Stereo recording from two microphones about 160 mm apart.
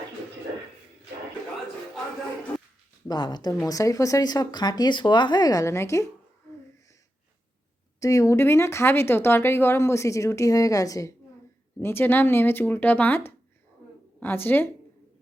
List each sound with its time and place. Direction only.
3.1 s speech: 25° left (ahead or behind)
7.9 s speech: 20° left (ahead or behind)